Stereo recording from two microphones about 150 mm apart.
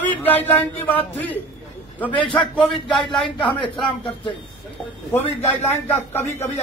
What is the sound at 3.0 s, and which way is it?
Speech, 35° left (ahead or behind).